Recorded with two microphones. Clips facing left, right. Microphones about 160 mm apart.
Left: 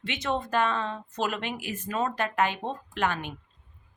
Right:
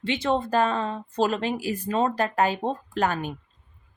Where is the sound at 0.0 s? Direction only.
30° right (ahead or behind).